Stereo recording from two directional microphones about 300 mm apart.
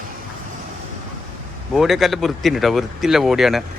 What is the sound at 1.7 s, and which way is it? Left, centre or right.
Speech, centre.